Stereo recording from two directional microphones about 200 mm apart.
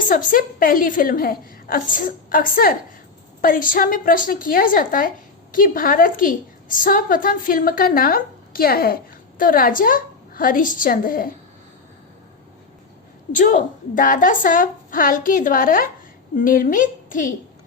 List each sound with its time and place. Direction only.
0.1 s a woman's voice: 45° left (ahead or behind)
13.3 s a woman's voice: 40° left (ahead or behind)